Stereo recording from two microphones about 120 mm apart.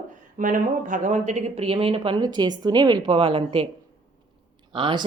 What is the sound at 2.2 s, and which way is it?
Speech, 35° right (ahead or behind).